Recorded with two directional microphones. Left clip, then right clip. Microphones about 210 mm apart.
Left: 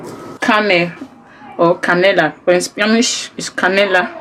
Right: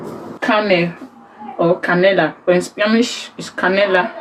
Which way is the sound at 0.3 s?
40° left (ahead or behind).